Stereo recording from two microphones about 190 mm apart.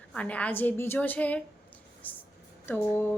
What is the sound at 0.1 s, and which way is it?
A woman's voice, 5° left (ahead or behind).